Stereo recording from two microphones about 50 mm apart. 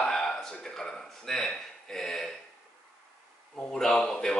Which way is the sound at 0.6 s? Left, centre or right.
Centre.